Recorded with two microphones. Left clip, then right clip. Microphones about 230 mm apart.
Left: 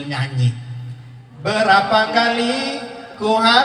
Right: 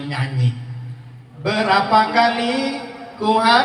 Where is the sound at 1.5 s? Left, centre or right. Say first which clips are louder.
Left 2 dB; left.